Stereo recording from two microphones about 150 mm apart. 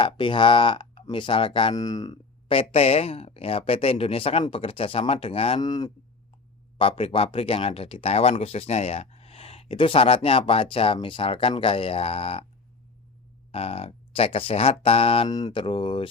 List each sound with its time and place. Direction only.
0.0 s speech: 35° left (ahead or behind)
1.7 s speech: 25° left (ahead or behind)
2.5 s speech: 40° left (ahead or behind)
5.5 s speech: 25° left (ahead or behind)
6.7 s speech: 40° left (ahead or behind)
13.5 s speech: 40° left (ahead or behind)
15.3 s speech: 25° left (ahead or behind)